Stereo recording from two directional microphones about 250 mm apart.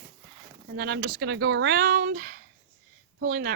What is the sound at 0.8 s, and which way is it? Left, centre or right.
Speech, right.